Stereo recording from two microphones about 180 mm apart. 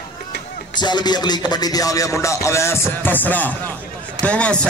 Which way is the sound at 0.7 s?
25° left (ahead or behind).